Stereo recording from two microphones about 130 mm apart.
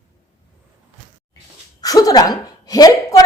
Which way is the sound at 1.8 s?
30° left (ahead or behind).